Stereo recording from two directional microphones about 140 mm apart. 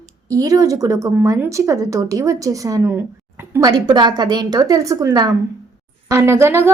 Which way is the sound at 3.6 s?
30° right (ahead or behind).